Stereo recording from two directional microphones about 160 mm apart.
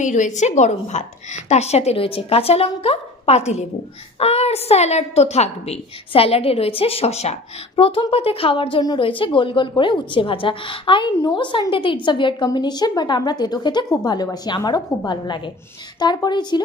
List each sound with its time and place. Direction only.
0.0 s a woman's voice: 50° left (ahead or behind); by 16.6 s 25° left (ahead or behind)